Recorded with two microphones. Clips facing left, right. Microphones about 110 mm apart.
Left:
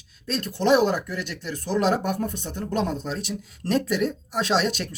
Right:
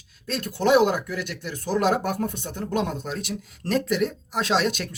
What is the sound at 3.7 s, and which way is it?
Speech, 40° left (ahead or behind).